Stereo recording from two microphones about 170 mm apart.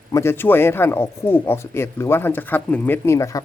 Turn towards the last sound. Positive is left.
turn(degrees=20)  # may be behind; listen again after turning